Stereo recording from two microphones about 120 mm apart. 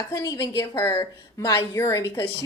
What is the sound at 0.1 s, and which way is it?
Speech, 30° left (ahead or behind).